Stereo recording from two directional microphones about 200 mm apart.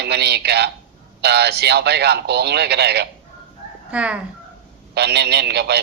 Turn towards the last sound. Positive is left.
turn(degrees=-55)  # may be behind; listen again after turning